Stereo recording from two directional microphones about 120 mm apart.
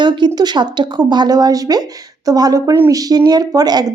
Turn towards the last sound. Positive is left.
turn(degrees=-35)  # may be behind; listen again after turning